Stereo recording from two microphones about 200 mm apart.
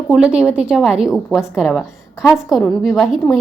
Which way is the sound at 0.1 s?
5° right (ahead or behind).